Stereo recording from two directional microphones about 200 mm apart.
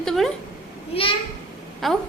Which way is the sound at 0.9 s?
30° left (ahead or behind).